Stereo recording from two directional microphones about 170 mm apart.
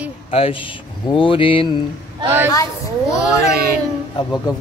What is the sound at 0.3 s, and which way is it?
Speech, 35° left (ahead or behind).